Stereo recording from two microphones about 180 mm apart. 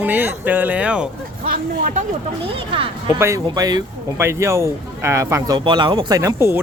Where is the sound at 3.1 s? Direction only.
15° right (ahead or behind).